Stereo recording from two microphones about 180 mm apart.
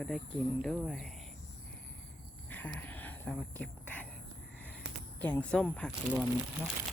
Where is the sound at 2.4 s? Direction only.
10° left (ahead or behind).